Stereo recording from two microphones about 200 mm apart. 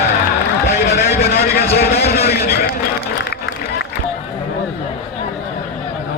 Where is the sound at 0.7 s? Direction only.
55° left (ahead or behind).